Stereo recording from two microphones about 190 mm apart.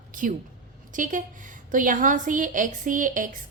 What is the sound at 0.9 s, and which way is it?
A woman's voice, 45° right (ahead or behind).